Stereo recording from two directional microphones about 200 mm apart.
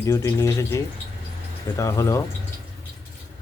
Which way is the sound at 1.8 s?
15° left (ahead or behind).